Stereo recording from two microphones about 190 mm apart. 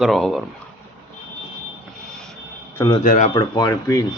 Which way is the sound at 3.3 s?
20° left (ahead or behind).